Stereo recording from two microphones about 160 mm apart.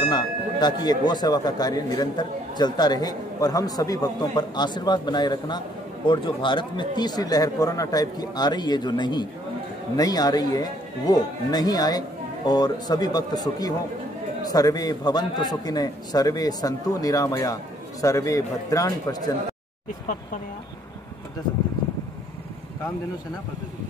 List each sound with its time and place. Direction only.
0.1 s speech: 25° left (ahead or behind)